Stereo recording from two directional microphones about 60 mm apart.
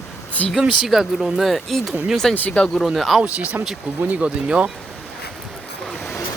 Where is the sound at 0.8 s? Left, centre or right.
Centre.